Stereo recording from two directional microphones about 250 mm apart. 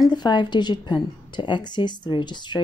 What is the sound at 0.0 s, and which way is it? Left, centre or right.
A woman's voice, centre.